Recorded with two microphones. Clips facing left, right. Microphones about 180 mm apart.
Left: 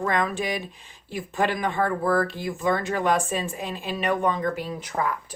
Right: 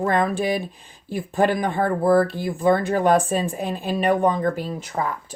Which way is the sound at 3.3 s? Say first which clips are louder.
Right 5 dB; 35° right (ahead or behind).